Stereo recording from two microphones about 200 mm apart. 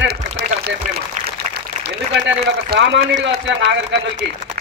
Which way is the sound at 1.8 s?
60° right (ahead or behind).